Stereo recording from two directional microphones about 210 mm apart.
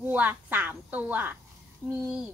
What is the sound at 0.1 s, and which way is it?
Speech, 10° right (ahead or behind).